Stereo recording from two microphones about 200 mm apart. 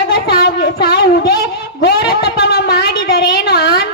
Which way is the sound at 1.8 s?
50° left (ahead or behind).